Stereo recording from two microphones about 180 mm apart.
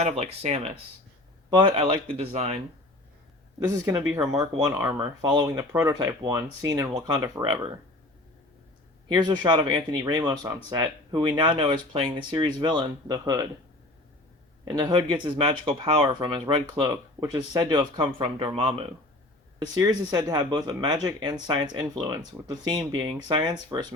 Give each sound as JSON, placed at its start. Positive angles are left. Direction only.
{"t": 0.0, "sound": "speech", "side_deg": -35}
{"t": 1.5, "sound": "speech", "side_deg": -25}
{"t": 3.6, "sound": "speech", "side_deg": -15}
{"t": 9.1, "sound": "speech", "side_deg": -25}
{"t": 14.8, "sound": "speech", "side_deg": -20}
{"t": 19.5, "sound": "speech", "side_deg": -20}